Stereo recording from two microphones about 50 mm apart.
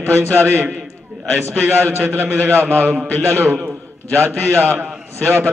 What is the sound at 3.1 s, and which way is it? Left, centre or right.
A man's voice, right.